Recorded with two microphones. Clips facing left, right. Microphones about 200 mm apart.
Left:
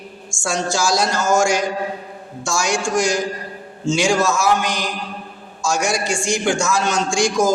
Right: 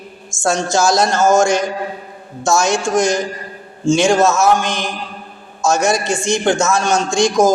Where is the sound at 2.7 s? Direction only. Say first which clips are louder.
Right 3 dB; 20° right (ahead or behind).